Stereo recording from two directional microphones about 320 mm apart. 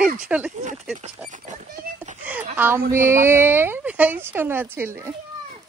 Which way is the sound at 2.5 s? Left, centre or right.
Centre.